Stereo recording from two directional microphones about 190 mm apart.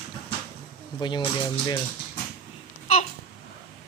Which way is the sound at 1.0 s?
25° left (ahead or behind).